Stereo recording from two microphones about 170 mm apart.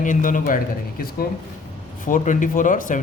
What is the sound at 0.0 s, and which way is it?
Speech, 50° left (ahead or behind).